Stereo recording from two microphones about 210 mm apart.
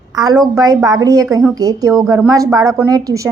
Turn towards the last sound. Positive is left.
turn(degrees=-15)  # may be behind; listen again after turning